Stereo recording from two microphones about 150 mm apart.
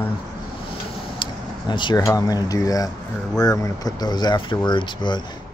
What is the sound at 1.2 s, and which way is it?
Vehicle, 30° left (ahead or behind).